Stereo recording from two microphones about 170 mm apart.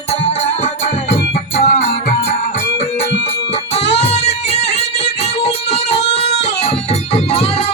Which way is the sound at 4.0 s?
40° left (ahead or behind).